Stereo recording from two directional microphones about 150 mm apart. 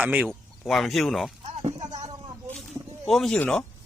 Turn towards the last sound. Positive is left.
turn(degrees=5)  # may be behind; listen again after turning